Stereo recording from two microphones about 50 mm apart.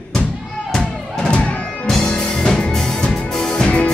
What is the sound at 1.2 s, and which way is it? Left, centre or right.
Music, centre.